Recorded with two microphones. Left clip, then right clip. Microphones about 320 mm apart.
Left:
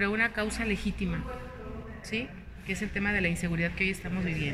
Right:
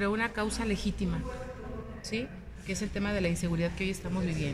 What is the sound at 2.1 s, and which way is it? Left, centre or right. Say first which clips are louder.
Speech: left 2 dB; centre.